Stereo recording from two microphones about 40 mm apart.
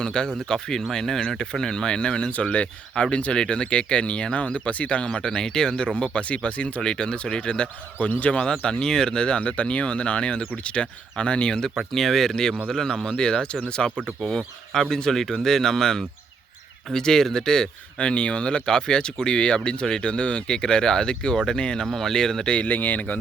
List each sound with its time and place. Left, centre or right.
0.0 s speech: centre
2.3 s speech: left
5.0 s speech: left
6.9 s speech: left
11.9 s speech: centre
14.2 s speech: centre
18.1 s speech: left
22.6 s speech: left